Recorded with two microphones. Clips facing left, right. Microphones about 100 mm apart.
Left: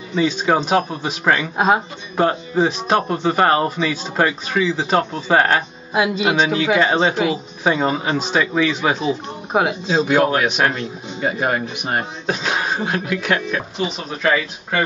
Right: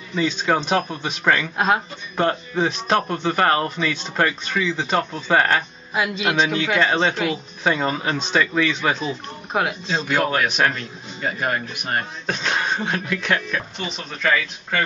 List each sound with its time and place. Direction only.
0.1 s speech: 5° left (ahead or behind)
4.3 s speech: 15° left (ahead or behind)